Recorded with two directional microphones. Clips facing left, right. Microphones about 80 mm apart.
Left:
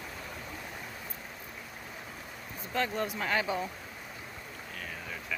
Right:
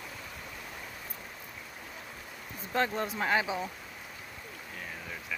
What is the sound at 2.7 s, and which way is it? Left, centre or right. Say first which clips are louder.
Speech: right 1 dB; right.